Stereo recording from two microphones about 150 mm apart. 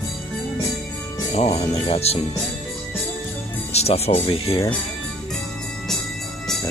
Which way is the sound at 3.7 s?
45° left (ahead or behind).